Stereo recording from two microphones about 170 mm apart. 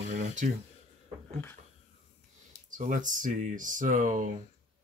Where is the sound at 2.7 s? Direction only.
50° right (ahead or behind).